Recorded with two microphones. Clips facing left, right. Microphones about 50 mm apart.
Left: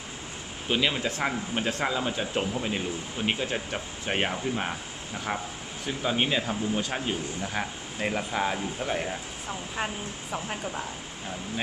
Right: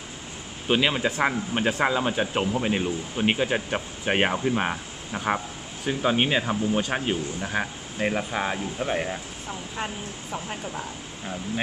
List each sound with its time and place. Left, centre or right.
0.7 s speech: right
10.3 s speech: centre